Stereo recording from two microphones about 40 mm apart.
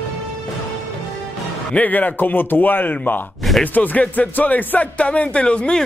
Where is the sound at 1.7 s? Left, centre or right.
Left.